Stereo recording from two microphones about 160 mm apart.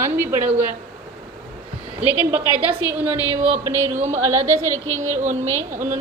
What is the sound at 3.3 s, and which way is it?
Speech, 45° right (ahead or behind).